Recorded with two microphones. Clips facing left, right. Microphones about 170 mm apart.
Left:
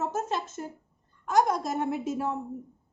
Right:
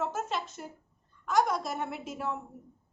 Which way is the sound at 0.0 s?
45° left (ahead or behind).